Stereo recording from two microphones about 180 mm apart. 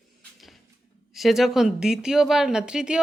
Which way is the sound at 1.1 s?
Centre (ahead or behind).